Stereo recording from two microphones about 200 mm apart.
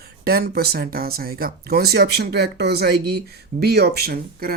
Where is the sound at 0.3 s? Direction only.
50° right (ahead or behind).